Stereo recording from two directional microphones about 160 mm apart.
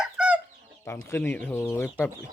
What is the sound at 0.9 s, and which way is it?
Speech, 15° left (ahead or behind).